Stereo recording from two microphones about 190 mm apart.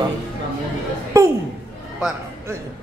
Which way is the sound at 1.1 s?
15° right (ahead or behind).